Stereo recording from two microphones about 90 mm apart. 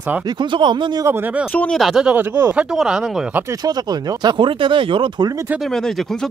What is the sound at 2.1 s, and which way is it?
Speech, 25° right (ahead or behind).